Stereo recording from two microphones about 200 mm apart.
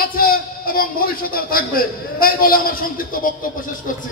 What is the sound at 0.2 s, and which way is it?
A man's voice, 45° left (ahead or behind).